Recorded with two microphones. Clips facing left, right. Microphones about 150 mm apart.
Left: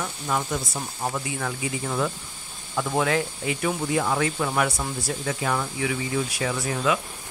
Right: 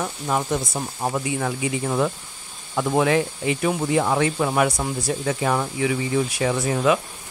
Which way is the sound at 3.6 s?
35° right (ahead or behind).